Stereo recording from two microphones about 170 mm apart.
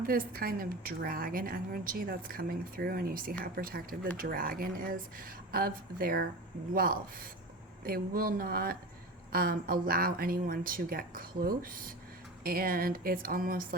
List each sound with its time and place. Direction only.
0.0 s a woman's voice: 60° right (ahead or behind)